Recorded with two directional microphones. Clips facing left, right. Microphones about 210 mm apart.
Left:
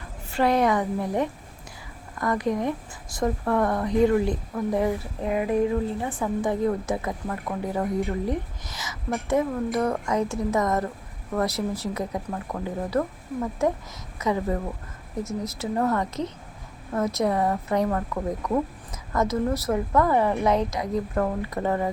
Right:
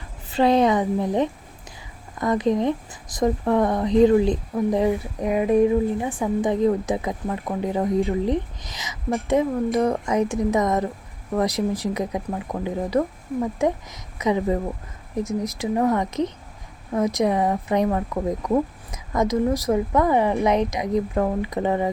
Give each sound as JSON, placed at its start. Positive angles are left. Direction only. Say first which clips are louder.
{"t": 0.3, "sound": "speech", "louder": "right 4 dB", "side_deg": -20}